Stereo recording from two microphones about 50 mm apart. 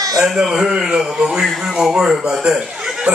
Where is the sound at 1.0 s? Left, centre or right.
Centre.